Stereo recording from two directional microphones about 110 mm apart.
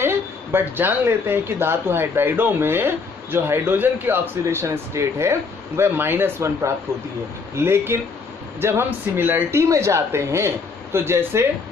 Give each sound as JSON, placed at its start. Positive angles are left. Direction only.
{"t": 0.0, "sound": "speech", "side_deg": -20}